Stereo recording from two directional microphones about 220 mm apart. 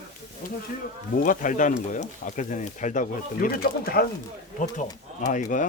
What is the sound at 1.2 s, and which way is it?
Speech, 40° left (ahead or behind).